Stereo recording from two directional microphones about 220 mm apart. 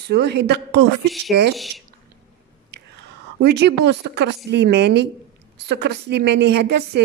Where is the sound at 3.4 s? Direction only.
50° right (ahead or behind).